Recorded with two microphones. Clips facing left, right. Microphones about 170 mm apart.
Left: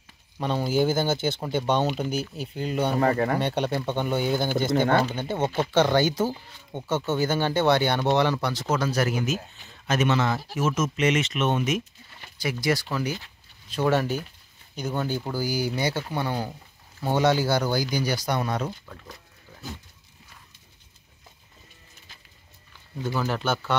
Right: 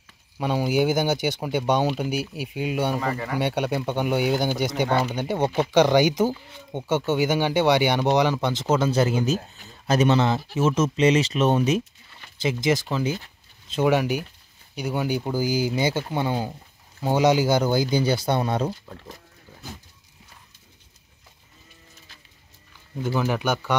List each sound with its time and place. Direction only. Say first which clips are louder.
0.4 s speech: right 2 dB; 10° right (ahead or behind)
3.0 s speech: left 5 dB; 55° left (ahead or behind)
3.3 s speech: right 1 dB; 10° right (ahead or behind); by 11.8 s 35° right (ahead or behind)
12.4 s speech: right 3 dB; 20° right (ahead or behind)
23.1 s speech: right 3 dB; 15° right (ahead or behind)